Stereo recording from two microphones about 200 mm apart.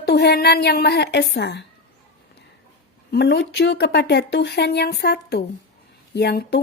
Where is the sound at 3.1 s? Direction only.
55° left (ahead or behind).